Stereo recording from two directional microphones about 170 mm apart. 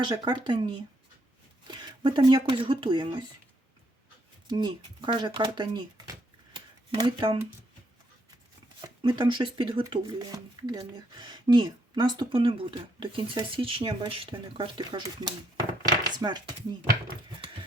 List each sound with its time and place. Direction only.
0.0 s speech: 25° right (ahead or behind)
4.4 s speech: 25° right (ahead or behind)
6.5 s a sound: 25° right (ahead or behind)
8.8 s speech: 25° right (ahead or behind)